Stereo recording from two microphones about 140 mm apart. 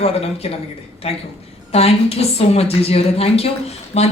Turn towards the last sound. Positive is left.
turn(degrees=50)  # may be behind; listen again after turning